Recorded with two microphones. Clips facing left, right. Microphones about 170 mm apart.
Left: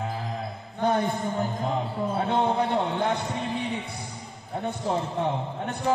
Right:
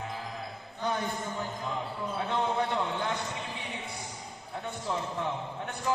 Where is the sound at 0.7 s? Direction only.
55° left (ahead or behind).